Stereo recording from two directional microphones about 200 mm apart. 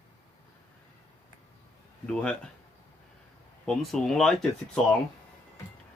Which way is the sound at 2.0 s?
5° left (ahead or behind).